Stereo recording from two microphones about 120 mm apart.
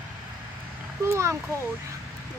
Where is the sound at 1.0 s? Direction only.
25° right (ahead or behind).